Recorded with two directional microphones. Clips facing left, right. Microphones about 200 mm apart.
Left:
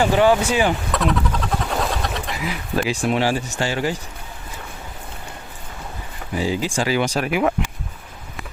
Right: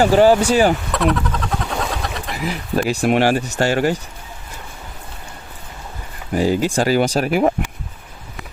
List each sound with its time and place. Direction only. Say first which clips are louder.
0.0 s speech: right 4 dB; 35° right (ahead or behind)
0.9 s a sound: right 2 dB; centre (ahead or behind)
2.4 s speech: right 4 dB; 45° right (ahead or behind)
2.9 s speech: right 5 dB; 60° right (ahead or behind)
6.3 s speech: right 5 dB; 50° right (ahead or behind)